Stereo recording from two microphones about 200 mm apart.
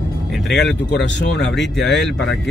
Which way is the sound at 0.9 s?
60° left (ahead or behind).